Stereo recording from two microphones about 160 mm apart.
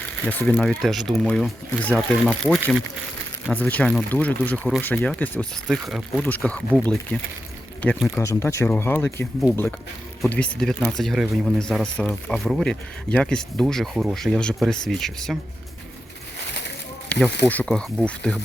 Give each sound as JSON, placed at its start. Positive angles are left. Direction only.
{"t": 0.3, "sound": "speech", "side_deg": 5}
{"t": 3.5, "sound": "speech", "side_deg": 10}
{"t": 8.1, "sound": "speech", "side_deg": 15}
{"t": 17.1, "sound": "speech", "side_deg": 5}